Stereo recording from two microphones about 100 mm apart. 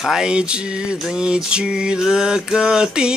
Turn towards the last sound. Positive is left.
turn(degrees=-10)  # may be behind; listen again after turning